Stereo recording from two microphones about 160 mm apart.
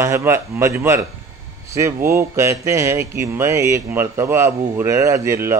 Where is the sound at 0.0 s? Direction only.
15° right (ahead or behind).